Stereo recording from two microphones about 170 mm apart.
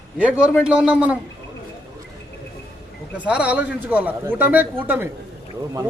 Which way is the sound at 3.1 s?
10° right (ahead or behind).